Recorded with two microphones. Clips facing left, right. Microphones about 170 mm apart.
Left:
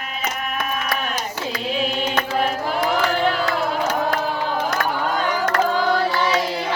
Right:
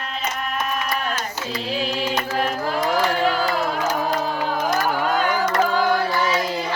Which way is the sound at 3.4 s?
70° left (ahead or behind).